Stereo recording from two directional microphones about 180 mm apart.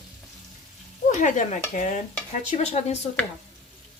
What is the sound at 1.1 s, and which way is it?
Stir, 45° left (ahead or behind).